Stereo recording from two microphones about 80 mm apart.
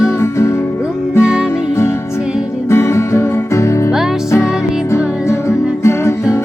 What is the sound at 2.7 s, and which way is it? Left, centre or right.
Music, left.